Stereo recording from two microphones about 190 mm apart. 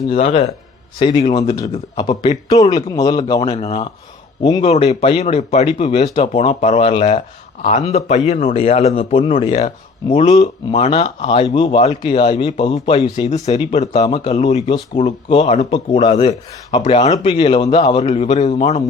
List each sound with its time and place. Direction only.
0.1 s speech: 35° left (ahead or behind)
3.5 s speech: 30° left (ahead or behind)
16.7 s speech: 35° left (ahead or behind)